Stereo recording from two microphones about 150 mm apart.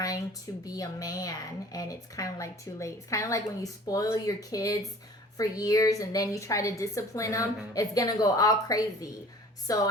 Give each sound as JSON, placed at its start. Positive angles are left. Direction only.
{"t": 0.6, "sound": "a woman's voice", "side_deg": 25}